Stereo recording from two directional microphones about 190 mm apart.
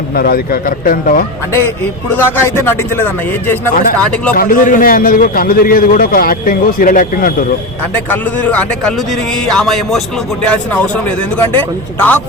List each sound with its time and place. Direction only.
0.2 s a man's voice: 50° left (ahead or behind)
2.1 s speech: 10° left (ahead or behind)
4.4 s a man's voice: 45° left (ahead or behind)
8.1 s speech: 10° left (ahead or behind)